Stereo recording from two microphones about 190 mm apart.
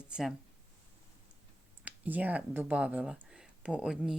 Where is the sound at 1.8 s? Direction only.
10° right (ahead or behind).